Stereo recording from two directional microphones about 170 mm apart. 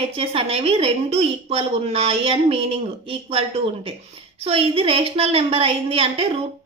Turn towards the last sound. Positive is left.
turn(degrees=-35)  # may be behind; listen again after turning